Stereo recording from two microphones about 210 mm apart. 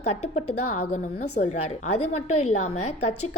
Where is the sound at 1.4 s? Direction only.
40° left (ahead or behind).